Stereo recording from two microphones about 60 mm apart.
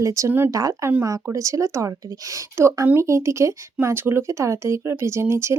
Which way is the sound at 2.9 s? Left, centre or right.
Right.